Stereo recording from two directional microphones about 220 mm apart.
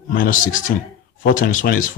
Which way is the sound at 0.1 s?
40° left (ahead or behind).